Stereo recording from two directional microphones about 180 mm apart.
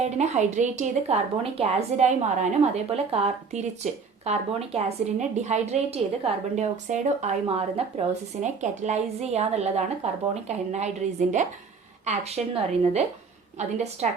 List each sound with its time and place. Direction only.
0.0 s a woman's voice: 40° right (ahead or behind)
13.6 s a woman's voice: 40° right (ahead or behind)